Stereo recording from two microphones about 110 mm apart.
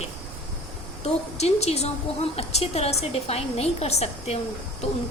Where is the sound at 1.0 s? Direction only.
75° left (ahead or behind).